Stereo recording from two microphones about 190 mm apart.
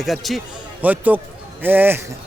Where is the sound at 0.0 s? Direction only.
Centre (ahead or behind).